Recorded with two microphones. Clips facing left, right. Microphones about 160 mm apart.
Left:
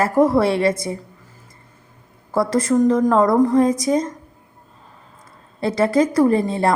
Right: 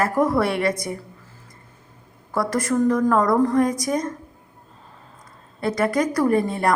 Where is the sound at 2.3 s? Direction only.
25° left (ahead or behind).